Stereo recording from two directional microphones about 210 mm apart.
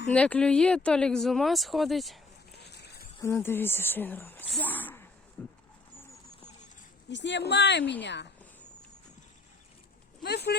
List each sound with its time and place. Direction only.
0.1 s speech: 5° left (ahead or behind)
2.5 s a sound: 50° left (ahead or behind)
3.2 s speech: 10° left (ahead or behind)
7.1 s speech: 55° left (ahead or behind)
10.2 s speech: 50° left (ahead or behind)